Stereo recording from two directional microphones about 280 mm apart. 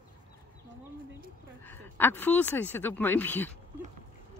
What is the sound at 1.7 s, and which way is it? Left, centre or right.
Speech, centre.